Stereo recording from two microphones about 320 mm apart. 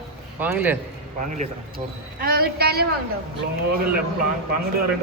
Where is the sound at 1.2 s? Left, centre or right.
Right.